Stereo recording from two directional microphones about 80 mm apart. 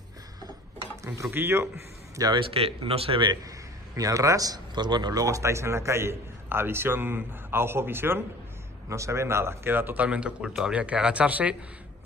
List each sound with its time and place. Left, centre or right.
1.0 s a man's voice: right
2.3 s speech: right
3.4 s a man's voice: right
10.0 s speech: centre